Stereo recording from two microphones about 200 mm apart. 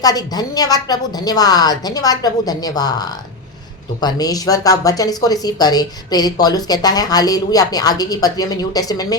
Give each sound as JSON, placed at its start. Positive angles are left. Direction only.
{"t": 0.0, "sound": "a woman's voice", "side_deg": 20}